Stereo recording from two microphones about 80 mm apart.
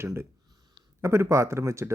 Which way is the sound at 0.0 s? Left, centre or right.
Right.